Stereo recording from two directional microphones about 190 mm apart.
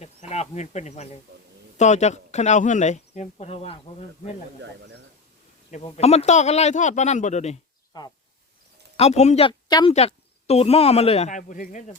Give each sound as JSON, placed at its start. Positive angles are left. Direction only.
{"t": 0.0, "sound": "a sound", "side_deg": 35}
{"t": 1.8, "sound": "speech", "side_deg": 35}
{"t": 5.7, "sound": "speech", "side_deg": 35}
{"t": 7.9, "sound": "speech", "side_deg": 25}
{"t": 9.0, "sound": "speech", "side_deg": 35}
{"t": 9.9, "sound": "speech", "side_deg": 35}